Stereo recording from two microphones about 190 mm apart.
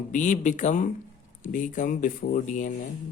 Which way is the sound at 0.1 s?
40° left (ahead or behind).